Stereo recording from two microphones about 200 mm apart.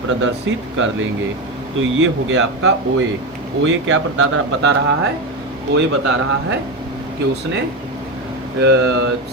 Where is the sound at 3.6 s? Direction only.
70° right (ahead or behind).